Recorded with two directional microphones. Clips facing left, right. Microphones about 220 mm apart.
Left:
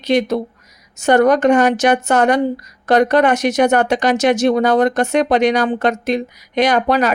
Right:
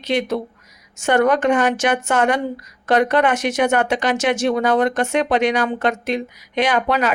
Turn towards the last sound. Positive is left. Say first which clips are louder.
# left 4 dB
turn(degrees=40)  # may be behind; listen again after turning